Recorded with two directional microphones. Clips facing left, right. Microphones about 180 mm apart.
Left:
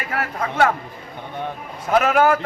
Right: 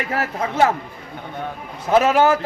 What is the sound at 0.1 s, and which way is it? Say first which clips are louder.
Speech: right 2 dB; 25° right (ahead or behind).